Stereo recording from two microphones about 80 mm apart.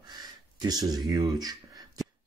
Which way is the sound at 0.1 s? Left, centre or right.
Right.